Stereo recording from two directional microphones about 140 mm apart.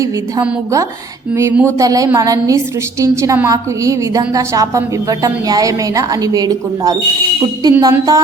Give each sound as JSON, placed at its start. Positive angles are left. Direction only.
{"t": 1.4, "sound": "a woman's voice", "side_deg": -15}